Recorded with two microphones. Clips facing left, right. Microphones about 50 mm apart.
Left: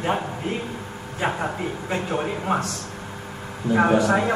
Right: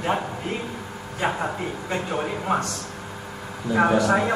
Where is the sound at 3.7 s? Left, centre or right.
Left.